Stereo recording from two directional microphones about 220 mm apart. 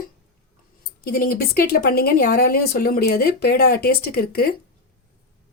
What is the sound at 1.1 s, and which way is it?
A woman's voice, 45° left (ahead or behind).